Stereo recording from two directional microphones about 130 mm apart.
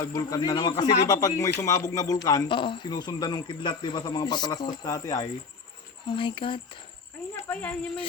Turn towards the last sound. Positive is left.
turn(degrees=10)  # may be behind; listen again after turning